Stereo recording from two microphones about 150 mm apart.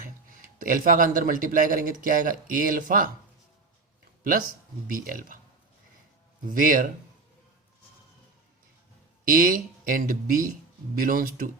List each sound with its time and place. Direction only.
0.0 s speech: 65° right (ahead or behind)
4.2 s speech: 65° right (ahead or behind)
6.5 s speech: 65° right (ahead or behind)
9.2 s speech: 65° right (ahead or behind)